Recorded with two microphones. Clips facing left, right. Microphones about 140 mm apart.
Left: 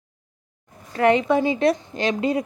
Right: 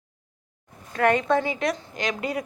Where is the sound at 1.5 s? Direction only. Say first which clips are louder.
Left 7 dB; 30° left (ahead or behind).